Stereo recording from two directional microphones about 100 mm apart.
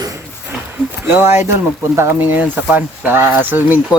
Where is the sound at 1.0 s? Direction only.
20° right (ahead or behind).